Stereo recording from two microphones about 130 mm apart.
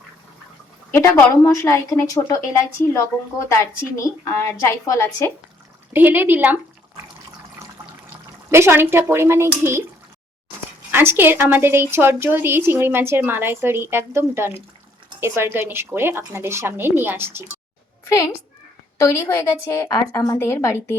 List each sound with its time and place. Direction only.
0.9 s a woman's voice: 20° left (ahead or behind)
5.9 s speech: 15° right (ahead or behind)
8.4 s speech: 20° right (ahead or behind)
10.9 s a woman's voice: 15° right (ahead or behind)
18.9 s a woman's voice: 20° left (ahead or behind)